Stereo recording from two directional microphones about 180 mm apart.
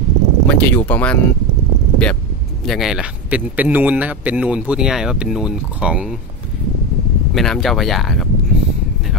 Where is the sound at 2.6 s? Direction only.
Centre (ahead or behind).